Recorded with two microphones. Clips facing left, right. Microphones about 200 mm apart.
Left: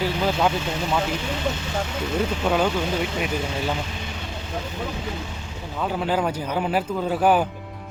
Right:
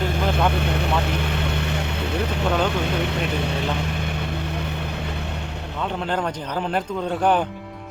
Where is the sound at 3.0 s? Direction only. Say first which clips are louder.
Right 1 dB; 65° right (ahead or behind).